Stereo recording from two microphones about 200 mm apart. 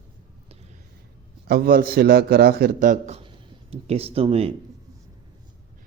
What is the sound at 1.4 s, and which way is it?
A man's voice, 50° right (ahead or behind).